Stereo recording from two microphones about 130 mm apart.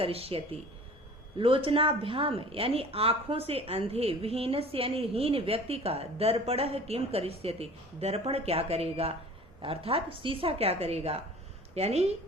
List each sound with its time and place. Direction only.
0.0 s a woman's voice: 45° right (ahead or behind)